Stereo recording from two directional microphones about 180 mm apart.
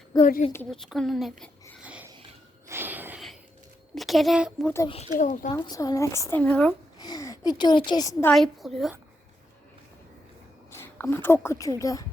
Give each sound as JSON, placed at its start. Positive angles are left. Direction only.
{"t": 0.1, "sound": "a woman's voice", "side_deg": 20}
{"t": 0.7, "sound": "speech", "side_deg": 0}
{"t": 1.8, "sound": "a sound", "side_deg": -5}
{"t": 3.9, "sound": "a woman's voice", "side_deg": 0}
{"t": 5.1, "sound": "speech", "side_deg": 45}
{"t": 5.5, "sound": "a woman's voice", "side_deg": 25}
{"t": 7.0, "sound": "a sound", "side_deg": 20}
{"t": 7.9, "sound": "a woman's voice", "side_deg": 20}
{"t": 8.3, "sound": "speech", "side_deg": 0}
{"t": 10.8, "sound": "speech", "side_deg": 15}